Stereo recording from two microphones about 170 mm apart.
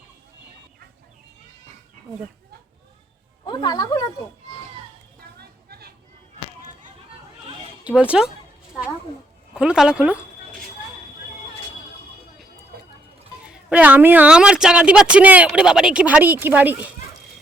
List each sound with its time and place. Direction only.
3.4 s speech: 25° left (ahead or behind)
5.4 s a sound: 70° right (ahead or behind)
7.9 s a woman's voice: 10° right (ahead or behind)
9.6 s speech: 5° right (ahead or behind)
13.5 s a woman's voice: 5° right (ahead or behind)